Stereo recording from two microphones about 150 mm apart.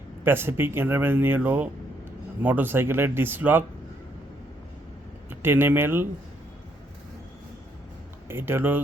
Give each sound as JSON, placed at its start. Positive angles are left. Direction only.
{"t": 0.3, "sound": "speech", "side_deg": -15}
{"t": 5.3, "sound": "speech", "side_deg": -15}
{"t": 8.3, "sound": "speech", "side_deg": -15}